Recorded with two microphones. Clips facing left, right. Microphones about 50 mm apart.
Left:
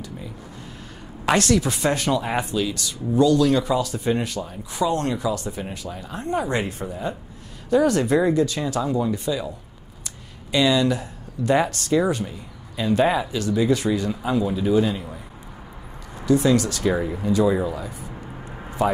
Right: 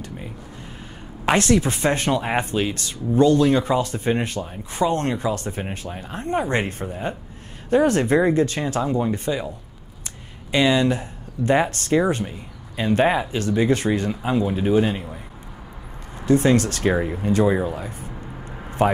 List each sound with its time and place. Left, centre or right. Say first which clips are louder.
1.2 s speech: right 1 dB; right
10.5 s speech: right 1 dB; right
16.3 s speech: right 1 dB; right
16.9 s speech: right 1 dB; right
17.2 s speech: even; right